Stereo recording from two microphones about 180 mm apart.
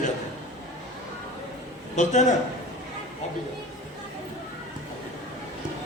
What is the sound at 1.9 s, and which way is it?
Speech, 40° left (ahead or behind).